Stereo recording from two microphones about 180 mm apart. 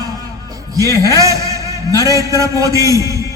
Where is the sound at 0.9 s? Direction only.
20° left (ahead or behind).